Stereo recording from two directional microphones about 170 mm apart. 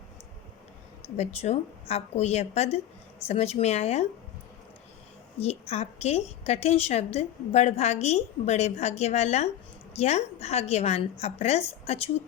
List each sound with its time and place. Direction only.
1.1 s a woman's voice: 40° left (ahead or behind)
5.4 s a woman's voice: 40° left (ahead or behind)